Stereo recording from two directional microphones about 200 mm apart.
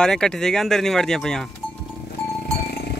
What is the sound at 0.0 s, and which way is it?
Speech, 5° left (ahead or behind).